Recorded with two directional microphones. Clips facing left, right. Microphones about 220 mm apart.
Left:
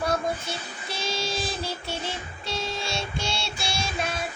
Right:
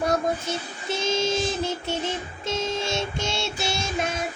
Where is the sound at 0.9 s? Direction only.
20° right (ahead or behind).